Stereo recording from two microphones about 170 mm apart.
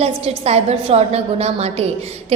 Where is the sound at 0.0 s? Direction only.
35° right (ahead or behind).